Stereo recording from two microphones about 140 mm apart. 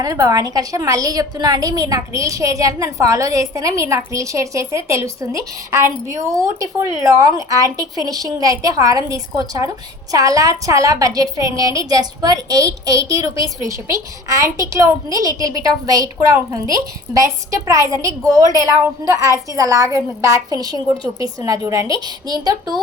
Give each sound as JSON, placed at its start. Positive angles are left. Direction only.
{"t": 0.0, "sound": "a woman's voice", "side_deg": -25}